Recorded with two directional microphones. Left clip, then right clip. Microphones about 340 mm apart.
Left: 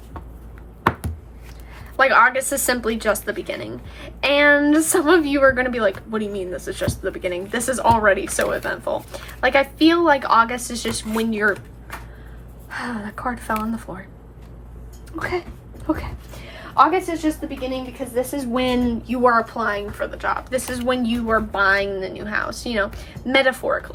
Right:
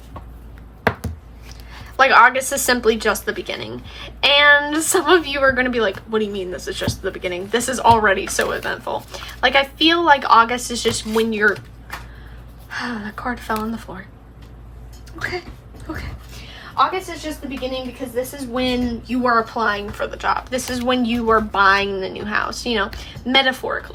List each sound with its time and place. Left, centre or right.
1.7 s a woman's voice: centre
12.7 s a woman's voice: centre
15.2 s speech: centre
18.1 s a woman's voice: left
19.0 s a woman's voice: centre